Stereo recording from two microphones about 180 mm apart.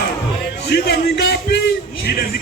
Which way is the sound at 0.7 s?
65° left (ahead or behind).